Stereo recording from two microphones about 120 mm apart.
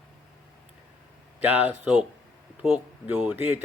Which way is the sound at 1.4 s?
15° right (ahead or behind).